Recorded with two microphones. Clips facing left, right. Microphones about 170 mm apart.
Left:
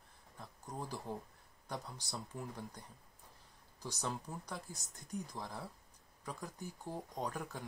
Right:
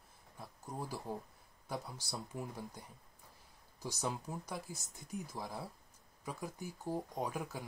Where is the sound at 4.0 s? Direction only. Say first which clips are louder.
Right 2 dB; 15° right (ahead or behind).